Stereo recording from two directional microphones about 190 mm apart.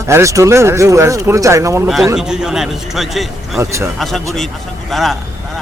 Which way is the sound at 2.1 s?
5° right (ahead or behind).